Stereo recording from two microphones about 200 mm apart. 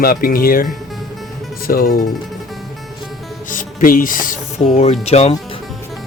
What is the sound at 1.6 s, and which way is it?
Music, 45° left (ahead or behind).